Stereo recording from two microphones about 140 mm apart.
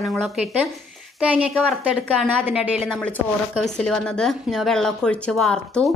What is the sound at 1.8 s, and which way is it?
Speech, 10° right (ahead or behind).